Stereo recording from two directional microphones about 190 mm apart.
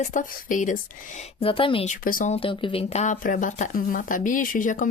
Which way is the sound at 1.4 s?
30° left (ahead or behind).